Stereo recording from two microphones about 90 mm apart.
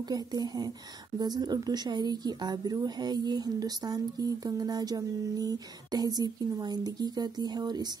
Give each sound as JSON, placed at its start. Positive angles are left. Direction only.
{"t": 0.1, "sound": "a woman's voice", "side_deg": -50}